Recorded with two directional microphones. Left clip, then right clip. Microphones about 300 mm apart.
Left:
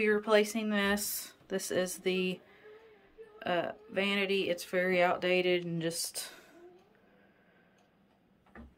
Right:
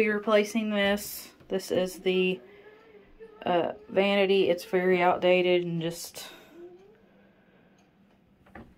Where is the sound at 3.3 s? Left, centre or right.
Centre.